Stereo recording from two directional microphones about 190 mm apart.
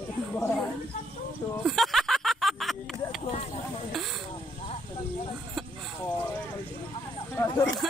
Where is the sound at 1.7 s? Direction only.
Centre (ahead or behind).